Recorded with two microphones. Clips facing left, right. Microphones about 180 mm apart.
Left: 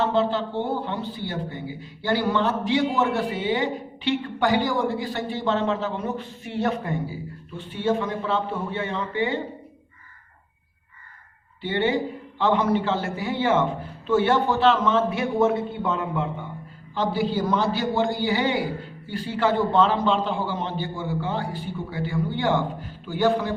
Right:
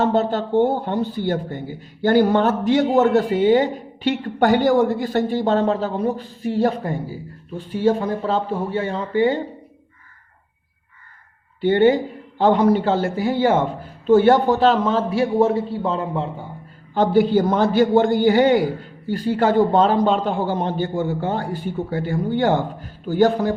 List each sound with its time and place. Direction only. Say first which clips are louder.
0.0 s speech: right 3 dB; 45° right (ahead or behind)
11.6 s a man's voice: right 8 dB; 45° right (ahead or behind)
16.9 s speech: right 8 dB; 50° right (ahead or behind)